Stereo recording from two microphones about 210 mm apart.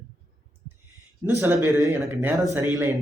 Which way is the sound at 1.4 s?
15° right (ahead or behind).